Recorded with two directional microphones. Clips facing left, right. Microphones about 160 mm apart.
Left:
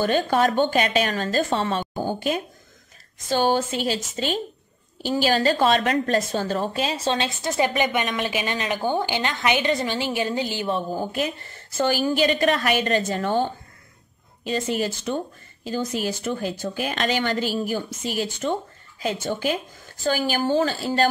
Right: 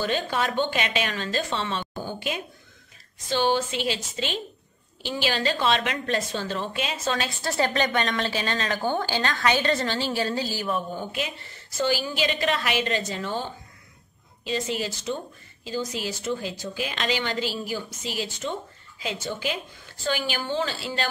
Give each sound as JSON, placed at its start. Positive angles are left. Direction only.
{"t": 0.0, "sound": "a woman's voice", "side_deg": 45}